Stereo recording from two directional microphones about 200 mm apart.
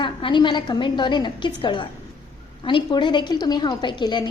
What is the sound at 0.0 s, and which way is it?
A woman's voice, 25° left (ahead or behind).